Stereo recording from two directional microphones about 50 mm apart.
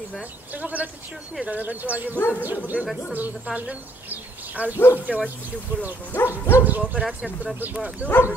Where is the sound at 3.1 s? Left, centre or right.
Right.